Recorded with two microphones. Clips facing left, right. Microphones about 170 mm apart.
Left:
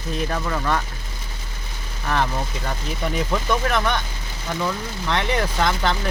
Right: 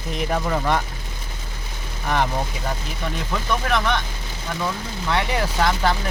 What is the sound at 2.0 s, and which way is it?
Speech, 15° right (ahead or behind).